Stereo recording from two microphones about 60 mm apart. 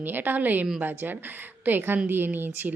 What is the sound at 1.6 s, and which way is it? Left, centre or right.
Speech, right.